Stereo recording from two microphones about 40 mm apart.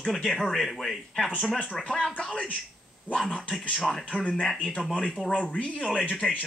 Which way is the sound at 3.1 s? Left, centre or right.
Left.